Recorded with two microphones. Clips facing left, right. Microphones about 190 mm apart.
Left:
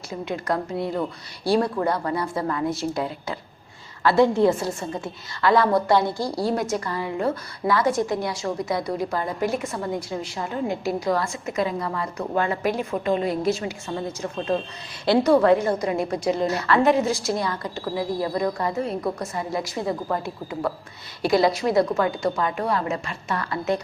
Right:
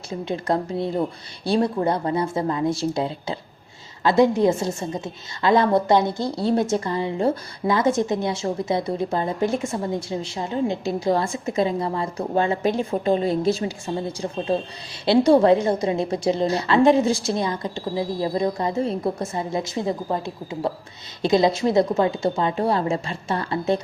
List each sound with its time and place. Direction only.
0.1 s a woman's voice: 25° right (ahead or behind)
4.0 s a woman's voice: 20° right (ahead or behind)